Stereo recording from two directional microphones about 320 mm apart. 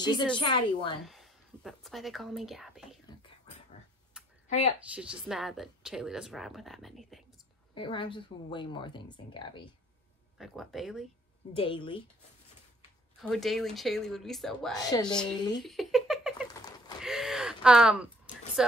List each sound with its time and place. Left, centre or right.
0.0 s speech: centre
1.0 s a woman's voice: centre
4.5 s a woman's voice: centre
4.9 s a woman's voice: centre
7.7 s speech: centre
10.4 s a woman's voice: centre
11.5 s speech: centre
13.2 s a woman's voice: centre
15.3 s speech: centre
15.6 s a sound: centre
16.5 s a sound: centre
17.0 s a sound: centre